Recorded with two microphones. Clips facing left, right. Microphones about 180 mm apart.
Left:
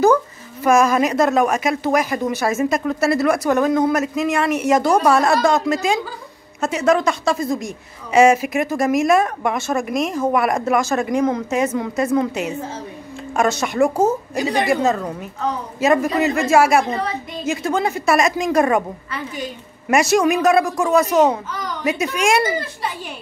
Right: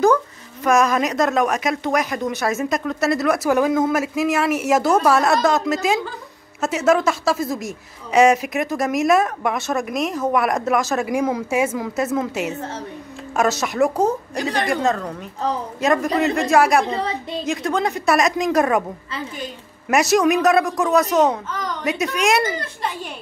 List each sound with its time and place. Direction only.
0.7 s speech: centre (ahead or behind)
15.4 s a woman's voice: 35° right (ahead or behind)
15.8 s speech: 5° left (ahead or behind)
19.9 s speech: centre (ahead or behind)